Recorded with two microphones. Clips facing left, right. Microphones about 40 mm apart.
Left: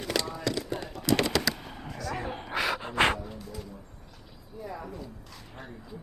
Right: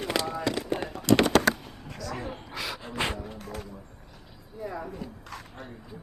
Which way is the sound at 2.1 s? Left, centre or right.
Left.